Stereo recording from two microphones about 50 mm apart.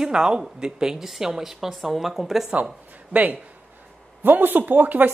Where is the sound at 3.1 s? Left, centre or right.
Right.